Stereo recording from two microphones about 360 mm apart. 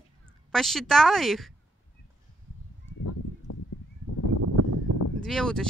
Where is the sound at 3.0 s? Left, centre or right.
Left.